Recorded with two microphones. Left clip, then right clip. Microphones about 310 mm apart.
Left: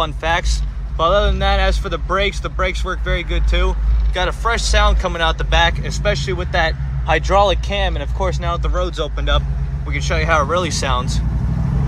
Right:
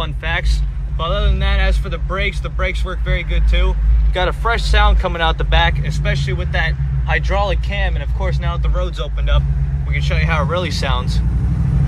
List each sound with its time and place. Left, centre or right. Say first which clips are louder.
0.0 s a man's voice: left 4 dB; centre
4.1 s speech: right 1 dB; centre
9.9 s speech: left 4 dB; centre